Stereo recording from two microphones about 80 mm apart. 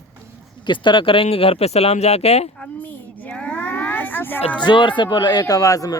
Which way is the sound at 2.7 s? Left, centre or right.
Left.